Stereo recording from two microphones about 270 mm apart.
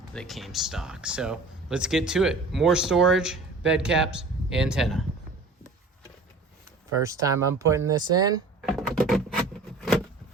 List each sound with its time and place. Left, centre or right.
0.1 s speech: centre
7.0 s speech: centre
8.6 s a sound: centre